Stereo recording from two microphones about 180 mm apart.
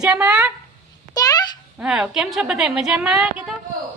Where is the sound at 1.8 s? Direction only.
5° right (ahead or behind).